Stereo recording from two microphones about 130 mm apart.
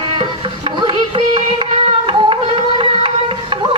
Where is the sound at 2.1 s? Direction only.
40° right (ahead or behind).